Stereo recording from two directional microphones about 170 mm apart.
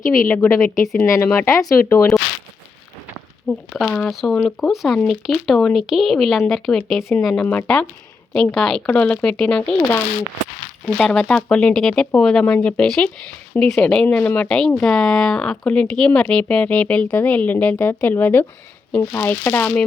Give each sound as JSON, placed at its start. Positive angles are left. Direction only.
{"t": 0.0, "sound": "a woman's voice", "side_deg": 55}
{"t": 0.3, "sound": "speech", "side_deg": 15}
{"t": 3.7, "sound": "speech", "side_deg": 5}